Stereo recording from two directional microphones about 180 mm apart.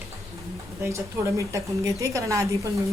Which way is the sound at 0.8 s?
15° right (ahead or behind).